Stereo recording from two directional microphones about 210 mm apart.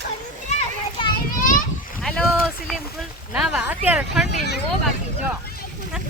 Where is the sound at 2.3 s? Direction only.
5° right (ahead or behind).